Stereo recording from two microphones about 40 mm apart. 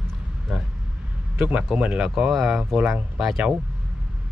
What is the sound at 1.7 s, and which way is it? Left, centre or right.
Speech, right.